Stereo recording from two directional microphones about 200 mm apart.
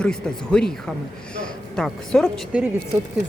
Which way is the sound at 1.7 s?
Centre (ahead or behind).